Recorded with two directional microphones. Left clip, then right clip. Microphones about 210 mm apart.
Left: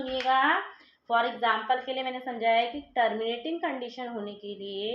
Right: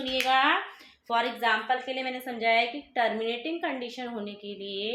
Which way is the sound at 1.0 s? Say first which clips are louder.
Left 1 dB; 20° right (ahead or behind).